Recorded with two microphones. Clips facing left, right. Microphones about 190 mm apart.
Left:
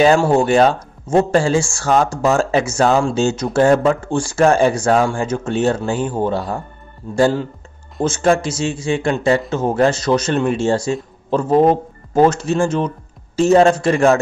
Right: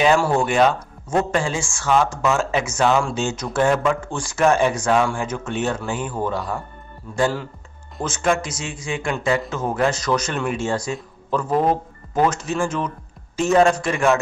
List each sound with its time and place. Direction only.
0.2 s a man's voice: 25° left (ahead or behind)